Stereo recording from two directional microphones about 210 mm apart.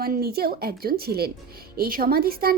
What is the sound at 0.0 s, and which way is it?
Speech, 45° right (ahead or behind).